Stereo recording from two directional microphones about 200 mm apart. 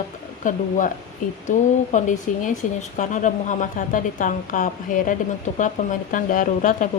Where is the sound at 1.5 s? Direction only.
40° left (ahead or behind).